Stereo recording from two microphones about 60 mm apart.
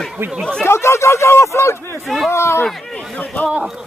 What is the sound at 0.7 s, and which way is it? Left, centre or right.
Speech, left.